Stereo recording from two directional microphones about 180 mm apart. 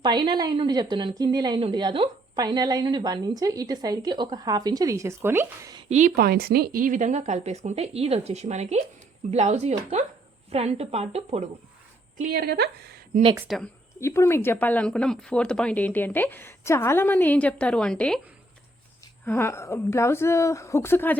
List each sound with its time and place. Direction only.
0.0 s speech: 25° right (ahead or behind)
5.9 s a woman's voice: 40° right (ahead or behind)
6.1 s a woman's voice: 60° right (ahead or behind); by 11.4 s 35° right (ahead or behind)
12.1 s speech: 50° right (ahead or behind)
13.5 s a woman's voice: centre (ahead or behind)
14.0 s speech: 15° left (ahead or behind)
19.2 s speech: 10° left (ahead or behind)